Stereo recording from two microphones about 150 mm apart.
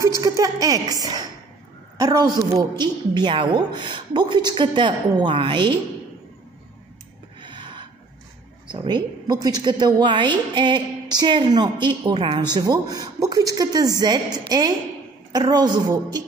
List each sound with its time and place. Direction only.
0.0 s a woman's voice: 20° right (ahead or behind)
7.3 s a sound: 30° right (ahead or behind)
8.6 s a woman's voice: 30° right (ahead or behind)
12.5 s a woman's voice: 25° right (ahead or behind)